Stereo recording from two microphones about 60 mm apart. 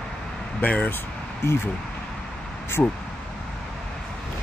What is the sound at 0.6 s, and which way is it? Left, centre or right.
Speech, left.